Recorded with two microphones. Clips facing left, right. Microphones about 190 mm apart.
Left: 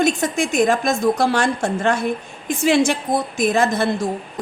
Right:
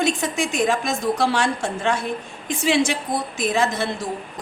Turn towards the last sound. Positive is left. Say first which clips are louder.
# left 4 dB
turn(degrees=50)  # may be behind; listen again after turning